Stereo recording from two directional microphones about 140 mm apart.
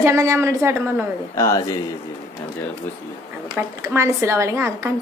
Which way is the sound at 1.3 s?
20° left (ahead or behind).